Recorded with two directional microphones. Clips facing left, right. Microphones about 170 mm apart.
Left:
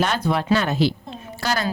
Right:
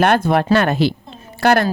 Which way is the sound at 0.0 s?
60° right (ahead or behind).